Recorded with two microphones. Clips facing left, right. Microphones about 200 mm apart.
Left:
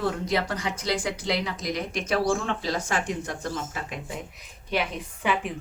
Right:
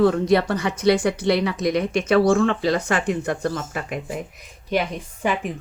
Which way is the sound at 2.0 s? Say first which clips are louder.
Right 8 dB; 70° right (ahead or behind).